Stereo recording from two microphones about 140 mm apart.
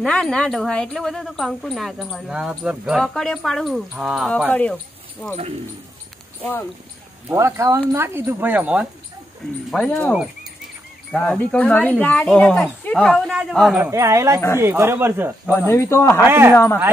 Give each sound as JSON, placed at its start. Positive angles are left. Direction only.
{"t": 0.0, "sound": "speech", "side_deg": 5}
{"t": 4.5, "sound": "speech", "side_deg": 10}
{"t": 7.3, "sound": "speech", "side_deg": -20}
{"t": 9.7, "sound": "speech", "side_deg": 5}
{"t": 13.8, "sound": "speech", "side_deg": -20}
{"t": 15.5, "sound": "speech", "side_deg": 20}
{"t": 16.3, "sound": "speech", "side_deg": -15}